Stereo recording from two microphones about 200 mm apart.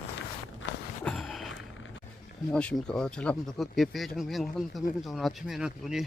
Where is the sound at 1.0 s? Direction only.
Centre (ahead or behind).